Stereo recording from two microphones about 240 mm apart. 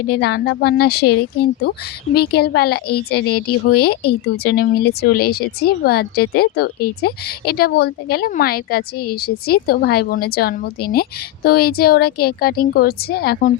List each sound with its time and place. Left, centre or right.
0.1 s a woman's voice: left